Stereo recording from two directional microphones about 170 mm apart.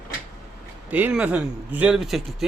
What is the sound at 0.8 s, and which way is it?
A man's voice, 10° right (ahead or behind).